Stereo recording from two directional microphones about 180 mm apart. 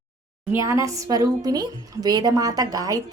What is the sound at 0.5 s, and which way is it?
A woman's voice, 15° right (ahead or behind).